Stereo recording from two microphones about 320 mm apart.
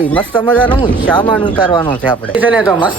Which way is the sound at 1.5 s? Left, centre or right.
Centre.